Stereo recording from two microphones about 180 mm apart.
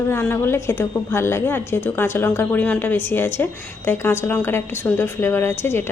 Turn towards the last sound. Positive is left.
turn(degrees=15)  # may be behind; listen again after turning